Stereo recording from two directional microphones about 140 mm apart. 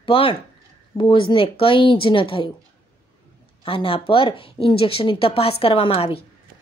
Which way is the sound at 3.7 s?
40° left (ahead or behind).